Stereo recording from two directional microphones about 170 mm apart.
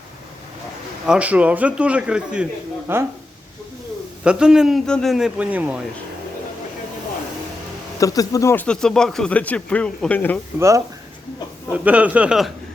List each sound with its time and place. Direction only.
1.0 s a man's voice: 5° right (ahead or behind)
4.2 s speech: 5° right (ahead or behind)
7.9 s speech: 20° left (ahead or behind)
8.6 s speech: 5° left (ahead or behind)
10.6 s a man's voice: 20° right (ahead or behind)